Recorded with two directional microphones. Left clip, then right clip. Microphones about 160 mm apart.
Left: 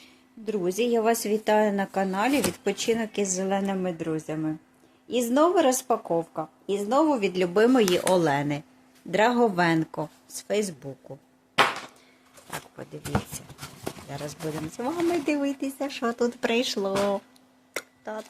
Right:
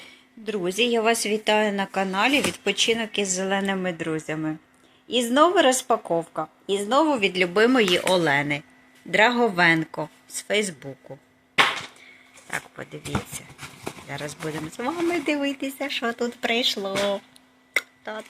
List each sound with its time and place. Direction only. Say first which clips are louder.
0.4 s a woman's voice: right 2 dB; 10° left (ahead or behind); by 6.5 s 5° right (ahead or behind)
6.7 s speech: right 2 dB; 10° left (ahead or behind)
12.5 s a woman's voice: right 6 dB; 5° right (ahead or behind); by 16.1 s 30° left (ahead or behind)
16.4 s speech: right 2 dB; 45° left (ahead or behind)
17.7 s a sound: right 7 dB; 20° left (ahead or behind)